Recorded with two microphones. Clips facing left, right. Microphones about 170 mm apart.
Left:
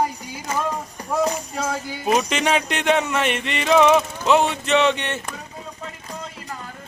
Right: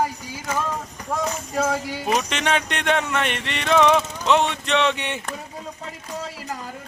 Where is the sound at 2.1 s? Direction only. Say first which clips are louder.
Left 3 dB; 5° left (ahead or behind).